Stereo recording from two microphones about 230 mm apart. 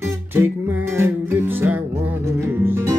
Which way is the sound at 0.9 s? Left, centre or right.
Centre.